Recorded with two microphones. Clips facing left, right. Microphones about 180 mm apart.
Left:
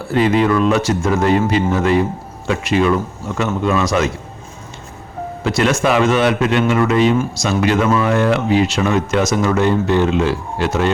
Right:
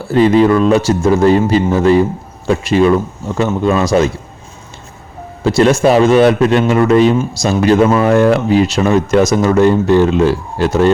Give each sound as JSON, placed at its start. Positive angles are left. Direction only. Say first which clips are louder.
{"t": 0.1, "sound": "speech", "louder": "right 5 dB", "side_deg": -35}
{"t": 5.4, "sound": "speech", "louder": "right 6 dB", "side_deg": -35}